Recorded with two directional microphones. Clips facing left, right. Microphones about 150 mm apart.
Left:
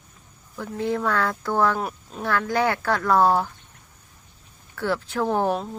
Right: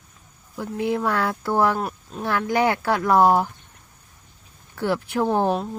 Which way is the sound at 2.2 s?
15° right (ahead or behind).